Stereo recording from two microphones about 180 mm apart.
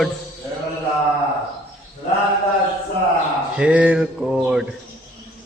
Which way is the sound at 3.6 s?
5° right (ahead or behind).